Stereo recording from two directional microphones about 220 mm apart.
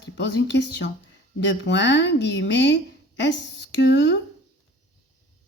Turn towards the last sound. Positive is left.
turn(degrees=55)  # may be behind; listen again after turning